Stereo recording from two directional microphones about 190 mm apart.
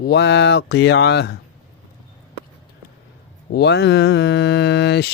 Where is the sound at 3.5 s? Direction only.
60° left (ahead or behind).